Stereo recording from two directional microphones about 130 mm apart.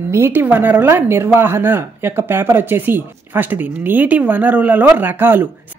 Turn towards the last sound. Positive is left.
turn(degrees=-15)  # may be behind; listen again after turning